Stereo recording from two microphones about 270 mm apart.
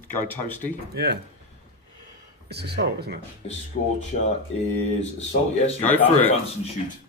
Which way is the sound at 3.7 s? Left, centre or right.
Left.